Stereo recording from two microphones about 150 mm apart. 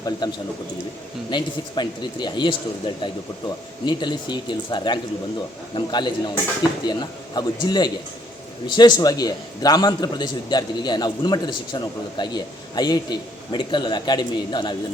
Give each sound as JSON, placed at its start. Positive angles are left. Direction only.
{"t": 0.0, "sound": "a man's voice", "side_deg": 30}